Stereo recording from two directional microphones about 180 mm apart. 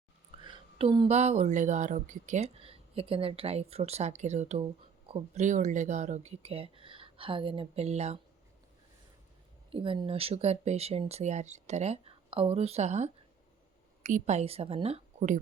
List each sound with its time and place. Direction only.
0.4 s speech: 30° right (ahead or behind)
9.7 s speech: 30° right (ahead or behind)